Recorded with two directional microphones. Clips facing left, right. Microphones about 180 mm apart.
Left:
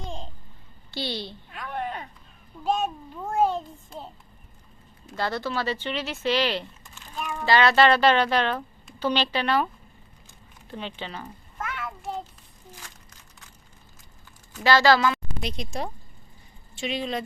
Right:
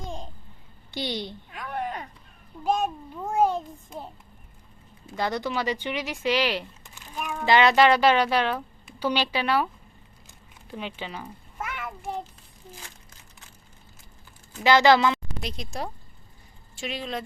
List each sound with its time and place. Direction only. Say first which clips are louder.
0.9 s a woman's voice: right 1 dB; 20° right (ahead or behind)
1.5 s a sound: left 1 dB; 5° right (ahead or behind)
2.6 s child singing: right 1 dB; 10° right (ahead or behind)
5.1 s a woman's voice: right 1 dB; 15° right (ahead or behind)
6.8 s a sound: even; 15° right (ahead or behind)
7.4 s a woman's voice: right 1 dB; 20° right (ahead or behind)
10.7 s a sound: even; 10° right (ahead or behind)
14.5 s speech: right 1 dB; 20° right (ahead or behind)
15.4 s speech: left 2 dB; centre (ahead or behind)
16.7 s speech: left 3 dB; 5° right (ahead or behind)